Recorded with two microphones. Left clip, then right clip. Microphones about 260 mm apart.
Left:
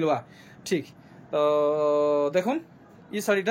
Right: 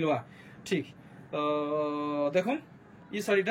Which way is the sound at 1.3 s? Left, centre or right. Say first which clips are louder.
Left 8 dB; centre.